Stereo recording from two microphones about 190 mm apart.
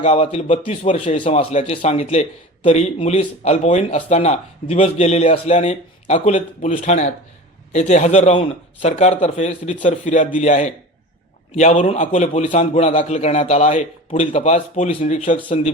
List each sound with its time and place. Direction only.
0.0 s speech: 35° left (ahead or behind)